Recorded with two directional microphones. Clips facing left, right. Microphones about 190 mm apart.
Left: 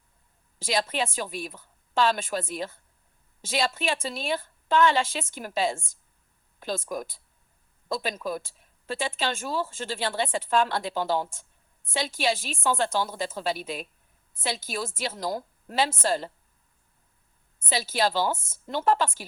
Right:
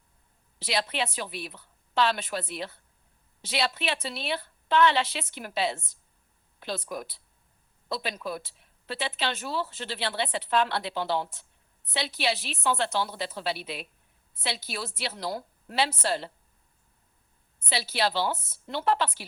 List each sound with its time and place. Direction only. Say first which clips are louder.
0.6 s speech: left 2 dB; 45° left (ahead or behind)
17.7 s speech: left 2 dB; 45° left (ahead or behind)